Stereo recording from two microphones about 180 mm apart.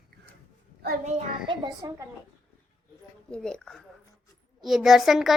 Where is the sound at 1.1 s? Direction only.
40° right (ahead or behind).